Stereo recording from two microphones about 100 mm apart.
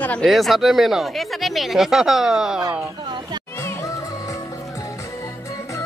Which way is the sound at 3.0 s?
45° right (ahead or behind).